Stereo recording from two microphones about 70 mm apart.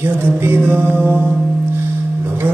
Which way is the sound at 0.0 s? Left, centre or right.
Right.